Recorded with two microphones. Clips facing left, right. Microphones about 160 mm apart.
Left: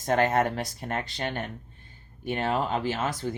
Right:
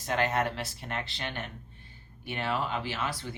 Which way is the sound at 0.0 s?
50° left (ahead or behind).